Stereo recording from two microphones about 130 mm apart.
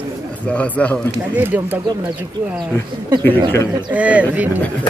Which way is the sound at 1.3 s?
15° right (ahead or behind).